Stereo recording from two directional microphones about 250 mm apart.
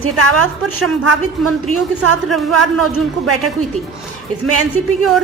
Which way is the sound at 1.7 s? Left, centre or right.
Right.